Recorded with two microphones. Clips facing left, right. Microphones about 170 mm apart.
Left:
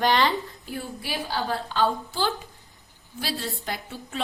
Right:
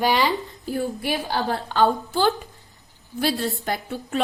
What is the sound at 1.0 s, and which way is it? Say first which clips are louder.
A woman's voice: right 5 dB; 55° right (ahead or behind).